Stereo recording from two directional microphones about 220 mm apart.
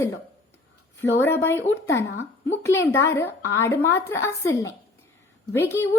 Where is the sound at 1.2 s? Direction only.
10° left (ahead or behind).